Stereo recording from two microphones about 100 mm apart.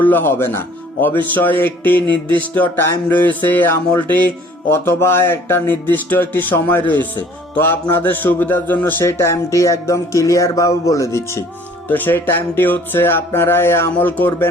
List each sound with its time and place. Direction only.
0.0 s a man's voice: 20° left (ahead or behind)